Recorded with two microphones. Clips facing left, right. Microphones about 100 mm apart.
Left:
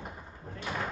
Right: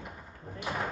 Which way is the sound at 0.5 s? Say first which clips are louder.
Right 1 dB; 15° right (ahead or behind).